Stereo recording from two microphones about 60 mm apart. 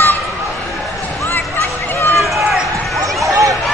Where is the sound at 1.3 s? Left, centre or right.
Left.